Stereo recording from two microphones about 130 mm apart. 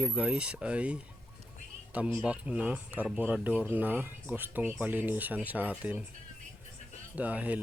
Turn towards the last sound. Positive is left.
turn(degrees=-10)  # may be behind; listen again after turning